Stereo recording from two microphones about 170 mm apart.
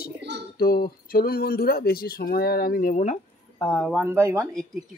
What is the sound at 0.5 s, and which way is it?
Speech, 60° left (ahead or behind).